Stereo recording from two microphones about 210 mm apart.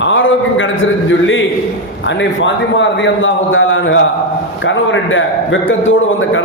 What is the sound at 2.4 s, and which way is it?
A man's voice, 60° left (ahead or behind).